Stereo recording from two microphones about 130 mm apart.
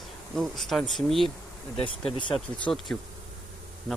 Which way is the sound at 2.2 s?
40° left (ahead or behind).